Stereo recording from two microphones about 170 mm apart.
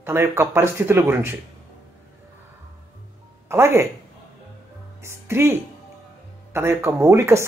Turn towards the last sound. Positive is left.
turn(degrees=-15)  # may be behind; listen again after turning